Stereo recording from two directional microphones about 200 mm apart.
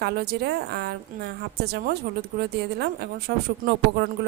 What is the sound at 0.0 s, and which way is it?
A woman's voice, 55° right (ahead or behind).